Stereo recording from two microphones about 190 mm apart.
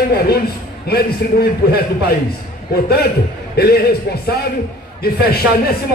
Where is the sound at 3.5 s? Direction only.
55° left (ahead or behind).